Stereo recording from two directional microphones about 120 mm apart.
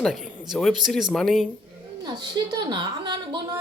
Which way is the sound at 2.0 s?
40° right (ahead or behind).